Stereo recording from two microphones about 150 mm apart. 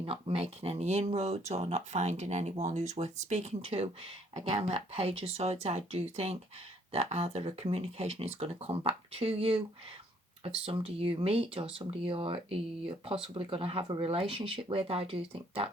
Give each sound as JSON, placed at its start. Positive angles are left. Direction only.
{"t": 0.0, "sound": "speech", "side_deg": -40}
{"t": 10.7, "sound": "speech", "side_deg": -40}